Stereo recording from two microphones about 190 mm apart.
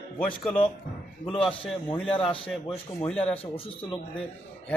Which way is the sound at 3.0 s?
5° left (ahead or behind).